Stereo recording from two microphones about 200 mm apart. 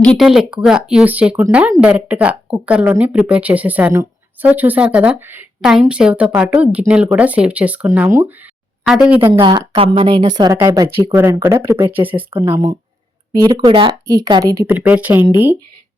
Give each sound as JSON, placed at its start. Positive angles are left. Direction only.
{"t": 0.0, "sound": "speech", "side_deg": 0}
{"t": 9.4, "sound": "speech", "side_deg": -20}